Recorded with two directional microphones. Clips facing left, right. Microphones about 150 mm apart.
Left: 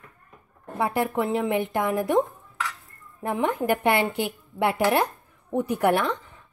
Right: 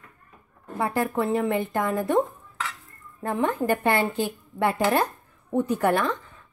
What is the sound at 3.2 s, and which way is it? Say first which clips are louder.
Speech: even; 15° left (ahead or behind).